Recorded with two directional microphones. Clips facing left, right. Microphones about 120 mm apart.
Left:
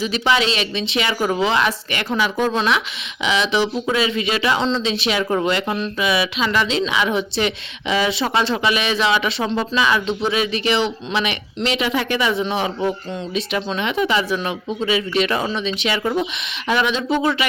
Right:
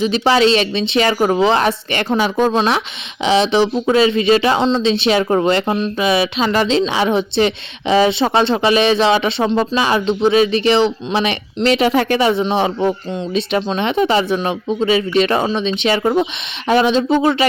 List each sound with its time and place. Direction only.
0.0 s a woman's voice: 35° right (ahead or behind)